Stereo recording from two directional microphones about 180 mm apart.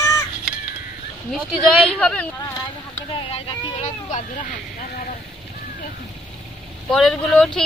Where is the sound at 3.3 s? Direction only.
35° left (ahead or behind).